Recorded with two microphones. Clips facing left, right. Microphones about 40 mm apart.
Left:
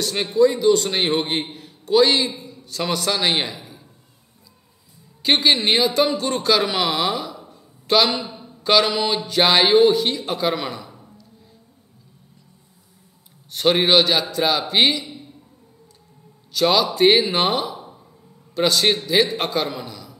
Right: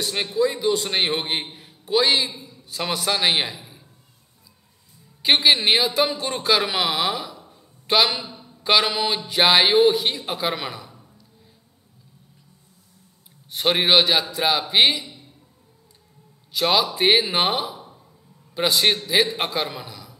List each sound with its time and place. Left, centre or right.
0.0 s a man's voice: centre
2.7 s a man's voice: centre
5.2 s a man's voice: centre
7.3 s a sound: centre
7.8 s a man's voice: centre
8.2 s a sound: centre
8.6 s a man's voice: centre
10.9 s a sound: centre
13.5 s a man's voice: centre
16.5 s a man's voice: centre
17.7 s a sound: centre
18.5 s a man's voice: centre